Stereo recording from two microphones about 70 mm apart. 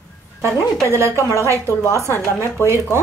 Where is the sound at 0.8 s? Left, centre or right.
Right.